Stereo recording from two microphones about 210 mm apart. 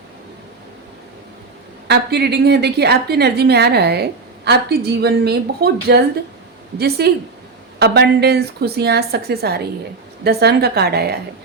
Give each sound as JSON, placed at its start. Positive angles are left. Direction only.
{"t": 1.9, "sound": "a woman's voice", "side_deg": -50}